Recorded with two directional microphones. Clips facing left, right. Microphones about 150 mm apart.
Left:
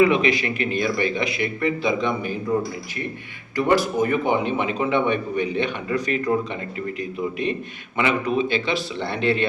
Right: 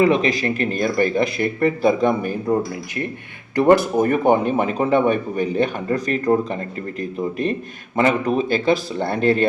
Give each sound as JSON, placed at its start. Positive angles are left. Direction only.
{"t": 0.0, "sound": "a man's voice", "side_deg": -40}
{"t": 3.5, "sound": "a man's voice", "side_deg": -55}
{"t": 7.9, "sound": "a man's voice", "side_deg": -40}